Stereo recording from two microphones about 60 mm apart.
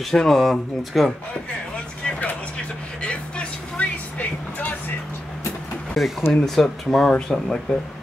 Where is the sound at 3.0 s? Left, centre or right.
Centre.